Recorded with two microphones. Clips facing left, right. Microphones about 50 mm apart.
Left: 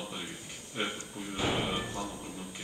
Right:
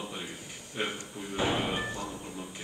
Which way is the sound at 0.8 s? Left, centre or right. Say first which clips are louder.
Right 1 dB; centre.